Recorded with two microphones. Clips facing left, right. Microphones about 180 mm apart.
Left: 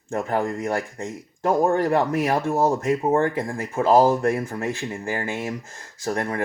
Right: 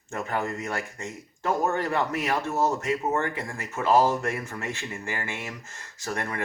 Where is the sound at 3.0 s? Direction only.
30° left (ahead or behind).